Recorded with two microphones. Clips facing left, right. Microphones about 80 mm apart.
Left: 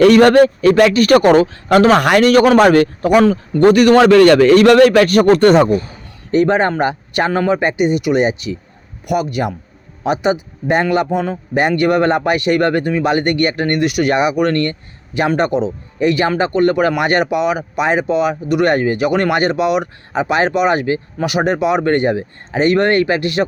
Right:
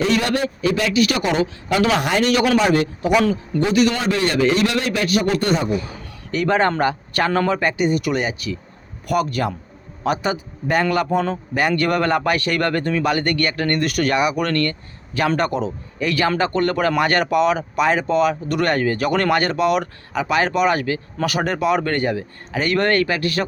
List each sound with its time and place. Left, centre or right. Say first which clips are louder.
0.0 s a man's voice: left 12 dB; left
5.6 s a man's voice: left 6 dB; left